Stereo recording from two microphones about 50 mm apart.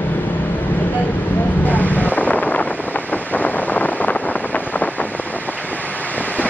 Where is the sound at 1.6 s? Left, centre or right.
Left.